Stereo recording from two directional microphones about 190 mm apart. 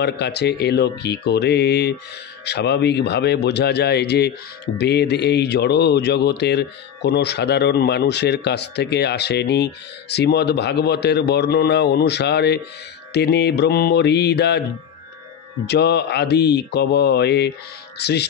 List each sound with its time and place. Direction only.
0.0 s speech: 60° left (ahead or behind)
15.6 s speech: 60° left (ahead or behind)